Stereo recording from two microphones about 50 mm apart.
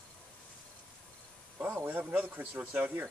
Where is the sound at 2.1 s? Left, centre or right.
Right.